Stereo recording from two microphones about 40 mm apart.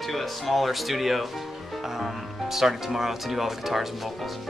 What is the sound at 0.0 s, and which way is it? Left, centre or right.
Speech, centre.